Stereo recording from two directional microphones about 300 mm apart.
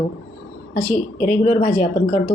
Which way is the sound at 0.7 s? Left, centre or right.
Left.